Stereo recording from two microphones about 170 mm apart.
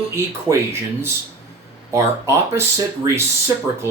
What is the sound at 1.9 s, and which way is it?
Speech, 15° right (ahead or behind).